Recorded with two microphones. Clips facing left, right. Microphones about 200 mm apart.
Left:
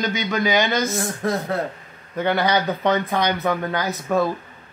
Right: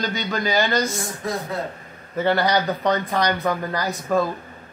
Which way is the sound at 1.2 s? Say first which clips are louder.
Left 4 dB; 55° left (ahead or behind).